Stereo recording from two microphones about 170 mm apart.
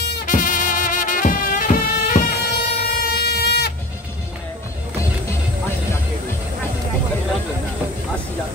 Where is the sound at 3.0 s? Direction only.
70° left (ahead or behind).